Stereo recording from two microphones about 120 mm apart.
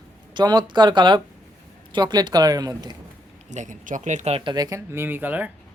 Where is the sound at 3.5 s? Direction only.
90° right.